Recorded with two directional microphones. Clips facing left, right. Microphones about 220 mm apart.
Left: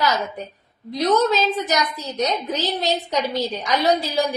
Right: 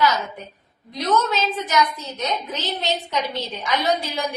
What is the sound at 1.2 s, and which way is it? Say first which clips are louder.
A woman's voice: left 4 dB; 35° left (ahead or behind).